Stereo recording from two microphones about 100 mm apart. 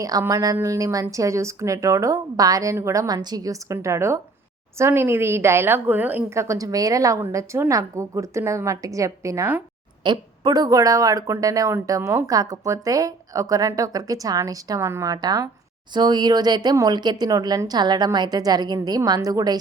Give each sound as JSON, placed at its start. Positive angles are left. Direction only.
{"t": 0.0, "sound": "a woman's voice", "side_deg": -35}
{"t": 6.3, "sound": "speech", "side_deg": -30}
{"t": 10.0, "sound": "speech", "side_deg": -50}
{"t": 15.1, "sound": "speech", "side_deg": -40}